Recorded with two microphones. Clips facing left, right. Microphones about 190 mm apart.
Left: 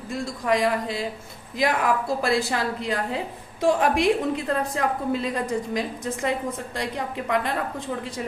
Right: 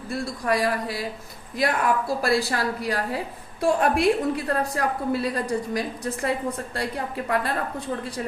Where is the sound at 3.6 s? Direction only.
90° left.